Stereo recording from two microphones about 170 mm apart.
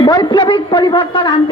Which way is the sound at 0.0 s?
25° left (ahead or behind).